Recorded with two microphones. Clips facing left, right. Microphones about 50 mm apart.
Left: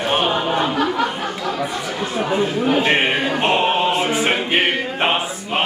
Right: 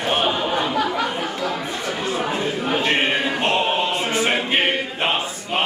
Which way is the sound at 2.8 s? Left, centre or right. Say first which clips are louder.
Left 3 dB; centre.